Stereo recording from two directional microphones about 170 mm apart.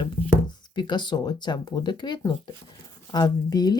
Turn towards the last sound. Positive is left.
turn(degrees=25)  # may be behind; listen again after turning